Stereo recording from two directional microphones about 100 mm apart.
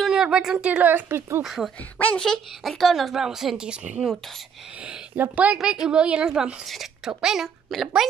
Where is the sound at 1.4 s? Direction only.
Centre (ahead or behind).